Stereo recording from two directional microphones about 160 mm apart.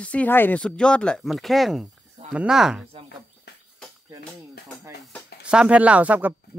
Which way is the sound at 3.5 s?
90° left.